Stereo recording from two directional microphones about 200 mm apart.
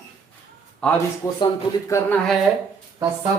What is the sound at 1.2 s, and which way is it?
Speech, 15° left (ahead or behind).